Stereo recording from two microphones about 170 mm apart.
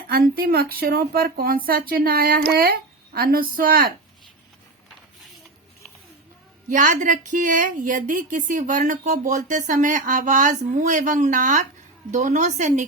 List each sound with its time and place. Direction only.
0.1 s speech: 65° right (ahead or behind)
6.7 s a woman's voice: 50° right (ahead or behind)